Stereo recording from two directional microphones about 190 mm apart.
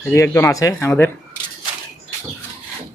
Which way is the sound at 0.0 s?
15° left (ahead or behind).